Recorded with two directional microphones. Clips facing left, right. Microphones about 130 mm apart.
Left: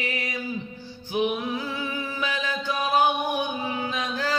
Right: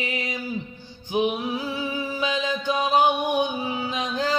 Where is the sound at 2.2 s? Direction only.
20° right (ahead or behind).